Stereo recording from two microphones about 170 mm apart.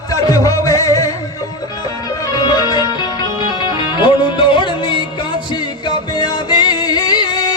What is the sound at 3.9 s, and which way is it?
Music, 30° left (ahead or behind).